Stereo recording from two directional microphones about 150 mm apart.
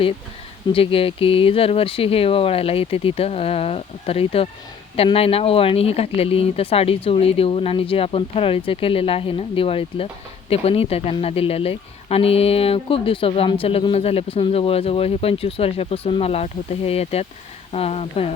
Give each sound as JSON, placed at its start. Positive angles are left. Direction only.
{"t": 0.7, "sound": "speech", "side_deg": 40}